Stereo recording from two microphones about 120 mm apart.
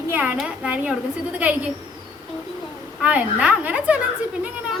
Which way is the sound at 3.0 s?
10° right (ahead or behind).